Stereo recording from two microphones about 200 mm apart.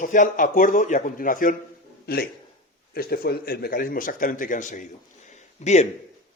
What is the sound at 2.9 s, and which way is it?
Speech, 50° left (ahead or behind).